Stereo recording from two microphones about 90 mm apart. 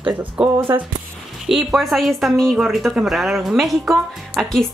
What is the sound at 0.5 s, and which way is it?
Speech, 25° right (ahead or behind).